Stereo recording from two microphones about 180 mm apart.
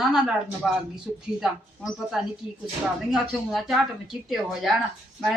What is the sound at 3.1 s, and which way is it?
Speech, centre (ahead or behind).